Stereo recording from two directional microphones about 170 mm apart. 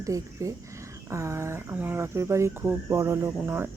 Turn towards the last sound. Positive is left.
turn(degrees=-15)  # may be behind; listen again after turning